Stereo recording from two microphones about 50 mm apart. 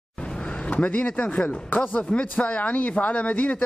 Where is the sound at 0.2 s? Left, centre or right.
Centre.